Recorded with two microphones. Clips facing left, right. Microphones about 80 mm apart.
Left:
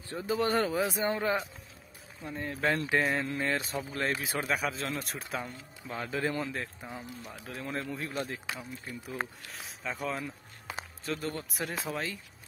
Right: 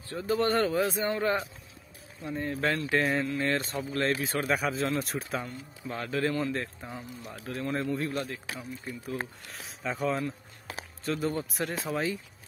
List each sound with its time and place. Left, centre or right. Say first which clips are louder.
0.1 s a man's voice: right 2 dB; centre
4.5 s a man's voice: right 4 dB; centre
8.2 s speech: right 1 dB; left
9.5 s a man's voice: right 3 dB; centre